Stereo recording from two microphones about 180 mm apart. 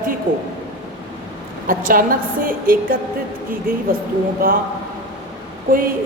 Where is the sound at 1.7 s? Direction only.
50° right (ahead or behind).